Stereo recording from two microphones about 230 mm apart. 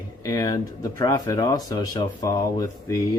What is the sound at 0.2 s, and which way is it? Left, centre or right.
Speech, centre.